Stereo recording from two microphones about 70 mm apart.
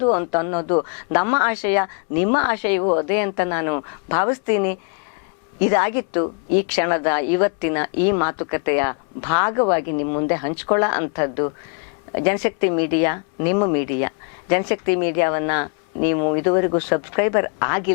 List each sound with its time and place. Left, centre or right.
0.0 s speech: left